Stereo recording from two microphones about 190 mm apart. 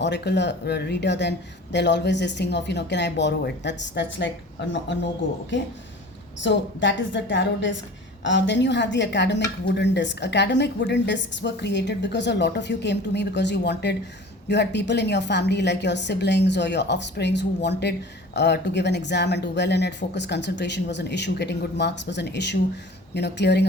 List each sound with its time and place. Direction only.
0.0 s a woman's voice: 65° left (ahead or behind)
6.4 s a woman's voice: 70° left (ahead or behind)